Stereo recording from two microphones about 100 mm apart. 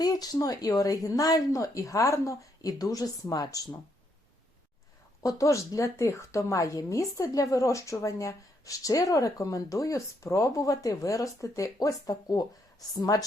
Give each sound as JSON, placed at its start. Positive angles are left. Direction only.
{"t": 0.0, "sound": "speech", "side_deg": 40}
{"t": 5.2, "sound": "speech", "side_deg": 35}